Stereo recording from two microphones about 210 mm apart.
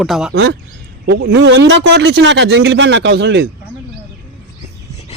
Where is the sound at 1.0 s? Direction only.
55° right (ahead or behind).